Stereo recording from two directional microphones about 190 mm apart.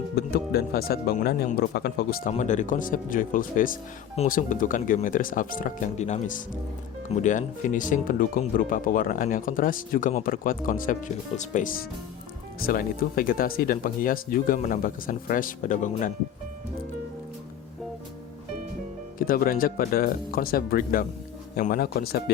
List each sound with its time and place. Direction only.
0.2 s speech: 55° left (ahead or behind)
2.3 s speech: 40° left (ahead or behind)
19.2 s speech: 50° left (ahead or behind)